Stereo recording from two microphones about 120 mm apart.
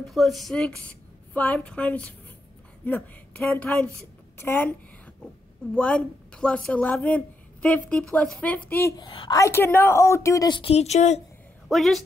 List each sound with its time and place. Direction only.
0.0 s a woman's voice: centre (ahead or behind); by 8.9 s 15° left (ahead or behind)
8.9 s a woman's voice: 40° left (ahead or behind)
9.3 s a woman's voice: 25° left (ahead or behind)
10.5 s a woman's voice: 55° left (ahead or behind); by 11.1 s 70° left (ahead or behind)
11.7 s a woman's voice: centre (ahead or behind)